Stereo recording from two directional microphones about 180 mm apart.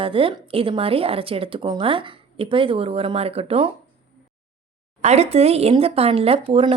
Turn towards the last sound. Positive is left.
turn(degrees=-30)  # may be behind; listen again after turning